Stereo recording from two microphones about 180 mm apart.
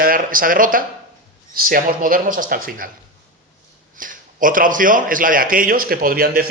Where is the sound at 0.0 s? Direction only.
50° right (ahead or behind).